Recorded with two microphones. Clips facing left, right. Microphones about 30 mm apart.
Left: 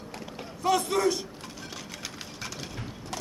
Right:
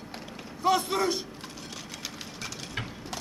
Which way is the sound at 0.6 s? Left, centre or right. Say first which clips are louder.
Left 1 dB; centre.